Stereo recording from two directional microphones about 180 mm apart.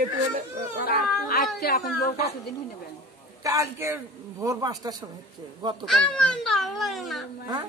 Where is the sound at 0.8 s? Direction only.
60° left (ahead or behind).